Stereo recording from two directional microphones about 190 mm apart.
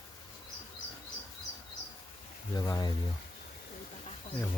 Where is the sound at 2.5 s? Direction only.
20° left (ahead or behind).